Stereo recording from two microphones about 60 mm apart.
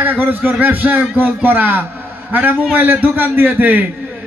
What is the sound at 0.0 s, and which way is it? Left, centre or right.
A man's voice, right.